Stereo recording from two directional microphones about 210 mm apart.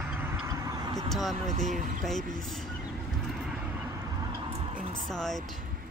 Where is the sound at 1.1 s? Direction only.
Centre (ahead or behind).